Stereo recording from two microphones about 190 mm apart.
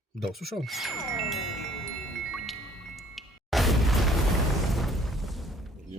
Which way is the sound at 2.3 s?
Centre (ahead or behind).